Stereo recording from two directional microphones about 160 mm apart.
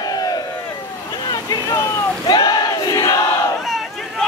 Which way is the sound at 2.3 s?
25° left (ahead or behind).